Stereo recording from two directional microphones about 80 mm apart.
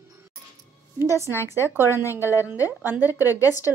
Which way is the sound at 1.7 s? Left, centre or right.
Right.